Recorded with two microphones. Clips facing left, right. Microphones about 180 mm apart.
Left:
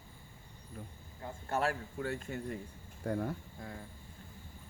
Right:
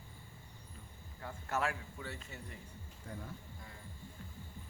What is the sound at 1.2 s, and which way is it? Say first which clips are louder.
Speech: left 3 dB; 30° left (ahead or behind).